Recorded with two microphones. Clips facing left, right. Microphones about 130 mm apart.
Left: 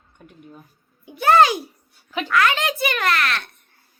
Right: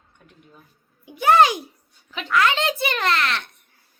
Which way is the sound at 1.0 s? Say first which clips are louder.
Left 1 dB; 15° right (ahead or behind).